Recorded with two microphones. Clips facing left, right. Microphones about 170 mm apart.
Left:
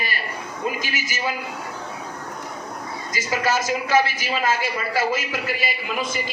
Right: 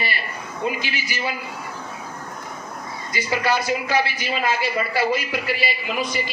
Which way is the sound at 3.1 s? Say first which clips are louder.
Right 1 dB; 45° left (ahead or behind).